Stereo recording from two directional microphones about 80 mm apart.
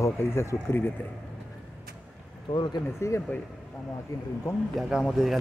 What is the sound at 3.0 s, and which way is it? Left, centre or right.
Speech, left.